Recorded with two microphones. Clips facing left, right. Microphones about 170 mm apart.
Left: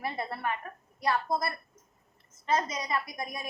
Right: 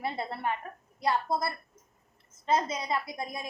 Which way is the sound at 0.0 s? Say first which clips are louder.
Right 1 dB; 25° right (ahead or behind).